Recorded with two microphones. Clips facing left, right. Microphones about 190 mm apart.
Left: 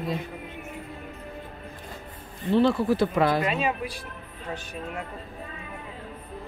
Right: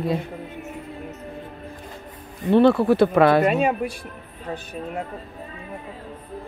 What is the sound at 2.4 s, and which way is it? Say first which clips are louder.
Speech: right 6 dB; 60° right (ahead or behind).